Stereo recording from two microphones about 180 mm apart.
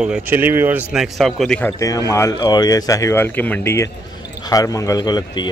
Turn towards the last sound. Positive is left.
turn(degrees=25)  # may be behind; listen again after turning